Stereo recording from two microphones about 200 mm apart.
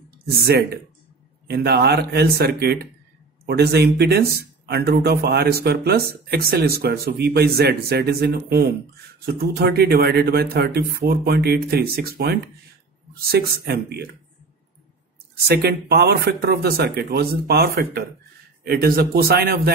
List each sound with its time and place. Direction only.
0.4 s speech: 50° right (ahead or behind)
15.4 s speech: 50° right (ahead or behind)